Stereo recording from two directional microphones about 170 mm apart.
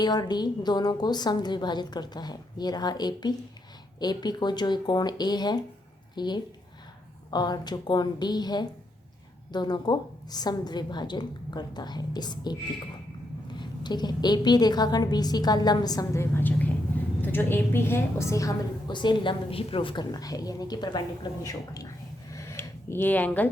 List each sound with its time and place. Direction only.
0.0 s a woman's voice: 25° left (ahead or behind)
13.6 s a woman's voice: 25° left (ahead or behind)
22.3 s a sound: 15° left (ahead or behind)